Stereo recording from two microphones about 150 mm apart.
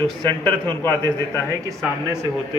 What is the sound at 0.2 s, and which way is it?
Speech, 30° right (ahead or behind).